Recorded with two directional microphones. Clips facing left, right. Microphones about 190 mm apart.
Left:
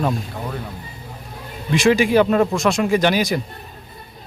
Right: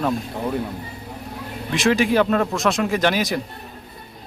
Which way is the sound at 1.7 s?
Centre (ahead or behind).